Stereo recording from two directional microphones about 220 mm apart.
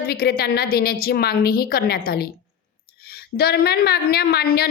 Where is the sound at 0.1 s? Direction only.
45° left (ahead or behind).